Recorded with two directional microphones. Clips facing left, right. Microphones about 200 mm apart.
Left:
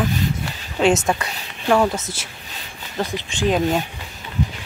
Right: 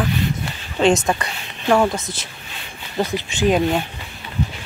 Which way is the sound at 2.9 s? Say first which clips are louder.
Right 3 dB; 10° right (ahead or behind).